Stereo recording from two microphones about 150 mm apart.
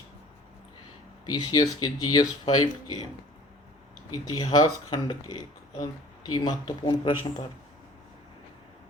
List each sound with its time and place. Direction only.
1.2 s speech: 25° left (ahead or behind)
4.1 s speech: 25° left (ahead or behind)